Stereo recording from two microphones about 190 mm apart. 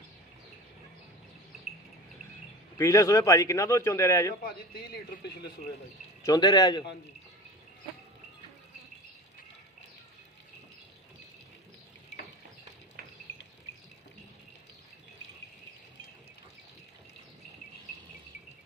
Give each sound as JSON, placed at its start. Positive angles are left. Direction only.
{"t": 2.7, "sound": "a man's voice", "side_deg": 15}
{"t": 5.2, "sound": "a man's voice", "side_deg": 60}
{"t": 6.2, "sound": "speech", "side_deg": 20}
{"t": 13.0, "sound": "a sound", "side_deg": -50}